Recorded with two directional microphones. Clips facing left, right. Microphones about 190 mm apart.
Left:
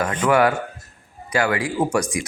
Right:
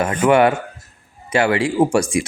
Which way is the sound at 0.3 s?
25° right (ahead or behind).